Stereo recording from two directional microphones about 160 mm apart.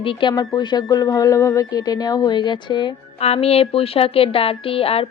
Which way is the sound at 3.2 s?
40° left (ahead or behind).